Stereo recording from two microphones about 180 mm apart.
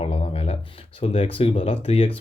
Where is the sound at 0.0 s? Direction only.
35° left (ahead or behind).